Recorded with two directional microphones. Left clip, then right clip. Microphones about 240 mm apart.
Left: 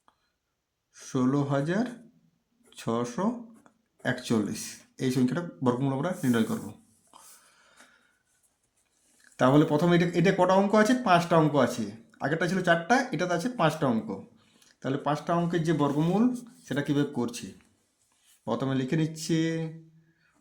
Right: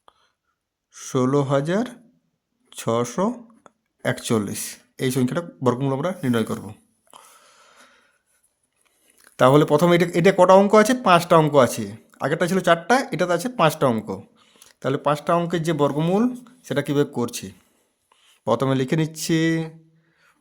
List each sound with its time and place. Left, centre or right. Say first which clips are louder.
0.9 s speech: right 7 dB; right
9.3 s speech: right 7 dB; right
18.4 s speech: right 9 dB; right